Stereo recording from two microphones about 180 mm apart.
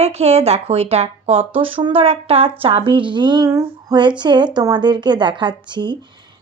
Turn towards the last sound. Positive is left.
turn(degrees=-25)  # may be behind; listen again after turning